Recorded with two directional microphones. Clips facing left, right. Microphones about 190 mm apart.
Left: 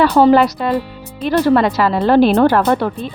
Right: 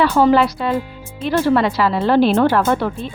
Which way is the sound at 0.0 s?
40° left (ahead or behind).